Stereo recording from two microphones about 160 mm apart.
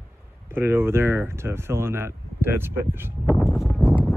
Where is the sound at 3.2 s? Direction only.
20° left (ahead or behind).